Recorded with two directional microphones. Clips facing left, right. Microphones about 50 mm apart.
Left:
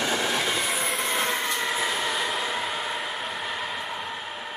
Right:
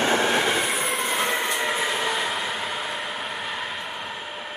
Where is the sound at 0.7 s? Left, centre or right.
Centre.